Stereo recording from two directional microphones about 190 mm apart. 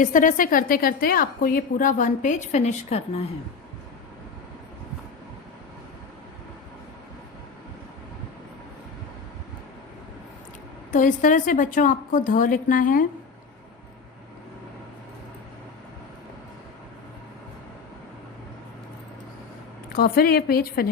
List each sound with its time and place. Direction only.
0.0 s a woman's voice: 45° left (ahead or behind)
10.9 s a woman's voice: 45° left (ahead or behind)
19.9 s a woman's voice: 50° left (ahead or behind)